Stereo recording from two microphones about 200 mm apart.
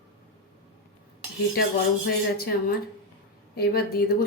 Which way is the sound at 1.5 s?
50° left (ahead or behind).